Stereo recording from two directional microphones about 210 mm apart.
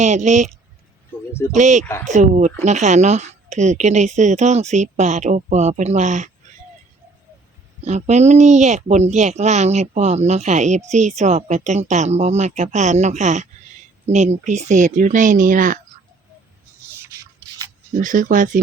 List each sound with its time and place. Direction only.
0.0 s a woman's voice: 35° right (ahead or behind)
1.3 s speech: 10° left (ahead or behind)
1.5 s a woman's voice: 35° right (ahead or behind)
7.8 s a woman's voice: 30° right (ahead or behind)
18.0 s a woman's voice: 40° right (ahead or behind)